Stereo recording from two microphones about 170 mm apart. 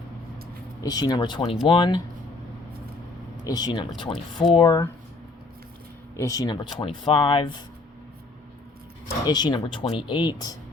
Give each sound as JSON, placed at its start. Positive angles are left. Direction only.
{"t": 0.8, "sound": "speech", "side_deg": 20}
{"t": 3.4, "sound": "speech", "side_deg": 25}
{"t": 6.1, "sound": "speech", "side_deg": 20}
{"t": 9.2, "sound": "speech", "side_deg": 25}